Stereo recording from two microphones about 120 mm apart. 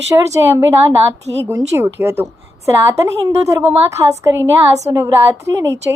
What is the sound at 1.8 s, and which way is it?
A woman's voice, 20° right (ahead or behind).